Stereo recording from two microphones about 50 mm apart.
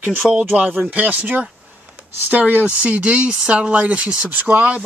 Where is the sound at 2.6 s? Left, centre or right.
Right.